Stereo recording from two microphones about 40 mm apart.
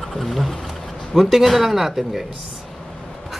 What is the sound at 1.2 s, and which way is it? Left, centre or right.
Speech, centre.